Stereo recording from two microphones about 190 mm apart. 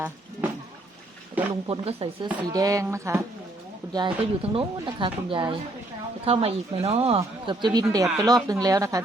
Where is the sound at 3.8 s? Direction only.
20° right (ahead or behind).